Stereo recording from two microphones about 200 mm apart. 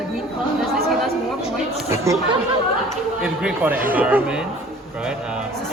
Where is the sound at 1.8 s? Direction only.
15° right (ahead or behind).